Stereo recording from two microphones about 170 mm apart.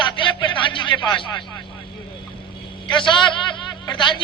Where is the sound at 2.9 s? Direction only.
30° left (ahead or behind).